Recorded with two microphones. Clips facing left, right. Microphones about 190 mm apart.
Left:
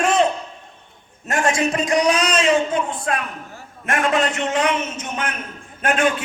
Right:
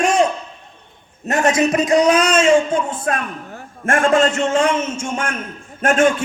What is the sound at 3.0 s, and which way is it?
A man's voice, 45° right (ahead or behind).